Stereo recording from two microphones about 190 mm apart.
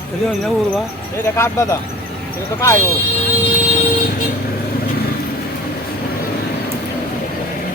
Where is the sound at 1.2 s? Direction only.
15° left (ahead or behind).